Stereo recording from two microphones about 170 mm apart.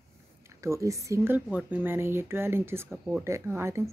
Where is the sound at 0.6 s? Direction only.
15° right (ahead or behind).